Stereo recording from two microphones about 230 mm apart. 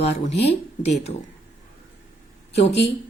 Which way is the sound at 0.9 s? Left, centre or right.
Left.